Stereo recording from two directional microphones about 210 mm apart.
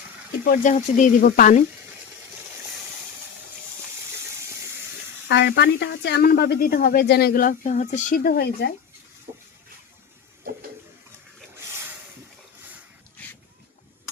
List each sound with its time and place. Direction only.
0.4 s speech: 40° left (ahead or behind)
5.3 s speech: 50° left (ahead or behind)
9.3 s a sound: 25° right (ahead or behind)